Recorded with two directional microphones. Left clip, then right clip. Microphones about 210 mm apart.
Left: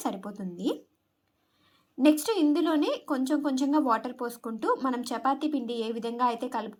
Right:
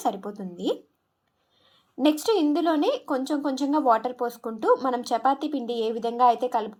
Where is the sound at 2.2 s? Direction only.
45° left (ahead or behind).